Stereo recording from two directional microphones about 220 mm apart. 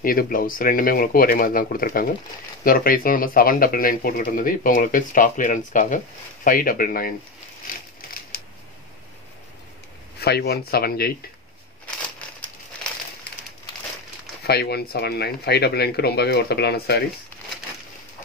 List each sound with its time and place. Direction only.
0.0 s speech: 40° left (ahead or behind)
10.2 s speech: 45° left (ahead or behind)
14.4 s speech: 45° left (ahead or behind)